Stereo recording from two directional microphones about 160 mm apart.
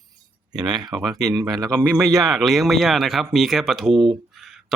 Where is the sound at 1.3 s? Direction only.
25° right (ahead or behind).